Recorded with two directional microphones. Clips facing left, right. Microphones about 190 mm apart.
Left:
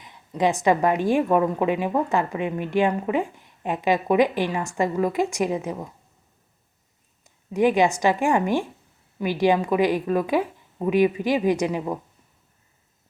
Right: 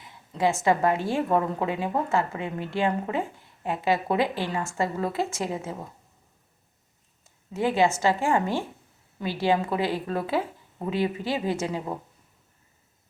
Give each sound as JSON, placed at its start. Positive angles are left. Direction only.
{"t": 0.0, "sound": "a woman's voice", "side_deg": 20}
{"t": 7.3, "sound": "a woman's voice", "side_deg": 15}